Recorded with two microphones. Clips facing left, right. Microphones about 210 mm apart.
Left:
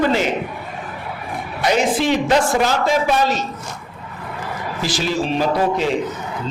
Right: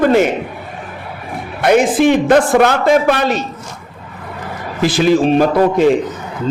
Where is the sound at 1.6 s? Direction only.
55° right (ahead or behind).